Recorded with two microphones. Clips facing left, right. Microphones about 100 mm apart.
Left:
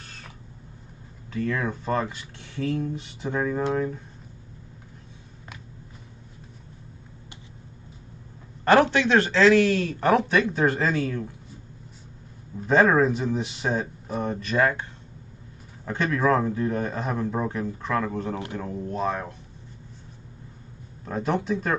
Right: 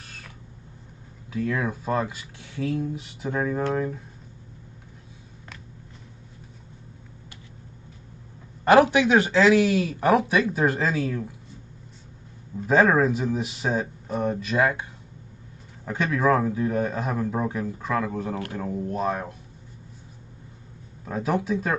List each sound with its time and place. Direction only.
1.3 s a man's voice: 5° right (ahead or behind)
8.6 s a man's voice: 10° right (ahead or behind)
12.5 s a man's voice: centre (ahead or behind)
21.0 s a man's voice: 5° right (ahead or behind)